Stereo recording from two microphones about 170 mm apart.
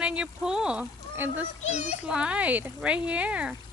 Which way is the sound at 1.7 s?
45° left (ahead or behind).